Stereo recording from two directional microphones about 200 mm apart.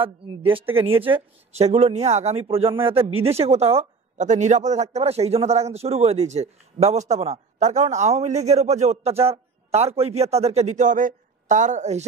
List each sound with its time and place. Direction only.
0.0 s speech: 25° right (ahead or behind)